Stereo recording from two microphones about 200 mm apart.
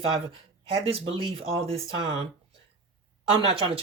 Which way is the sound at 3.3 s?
25° right (ahead or behind).